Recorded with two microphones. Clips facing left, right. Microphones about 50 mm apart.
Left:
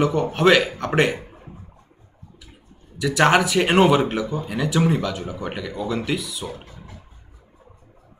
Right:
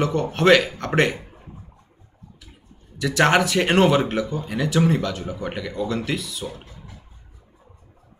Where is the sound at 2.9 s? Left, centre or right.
Centre.